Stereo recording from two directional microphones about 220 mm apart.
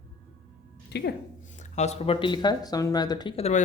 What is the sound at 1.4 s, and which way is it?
Speech, 35° left (ahead or behind).